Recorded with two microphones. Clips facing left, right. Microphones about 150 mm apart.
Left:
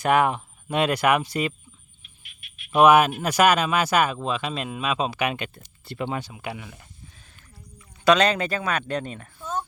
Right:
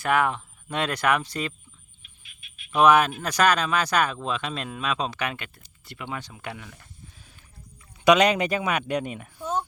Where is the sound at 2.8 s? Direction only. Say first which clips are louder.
Left 3 dB; 10° left (ahead or behind).